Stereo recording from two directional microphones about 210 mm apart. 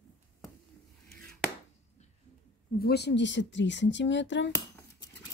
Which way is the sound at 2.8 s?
50° left (ahead or behind).